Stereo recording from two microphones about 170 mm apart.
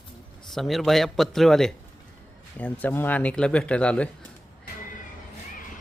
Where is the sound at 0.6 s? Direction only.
Centre (ahead or behind).